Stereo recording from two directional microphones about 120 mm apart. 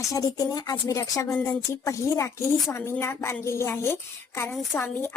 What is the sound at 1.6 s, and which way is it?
Speech, 25° left (ahead or behind).